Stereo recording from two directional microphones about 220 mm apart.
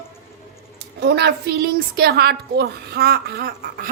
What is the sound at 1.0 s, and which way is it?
Speech, 50° right (ahead or behind).